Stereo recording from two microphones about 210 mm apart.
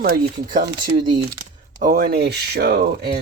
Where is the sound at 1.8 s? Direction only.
45° right (ahead or behind).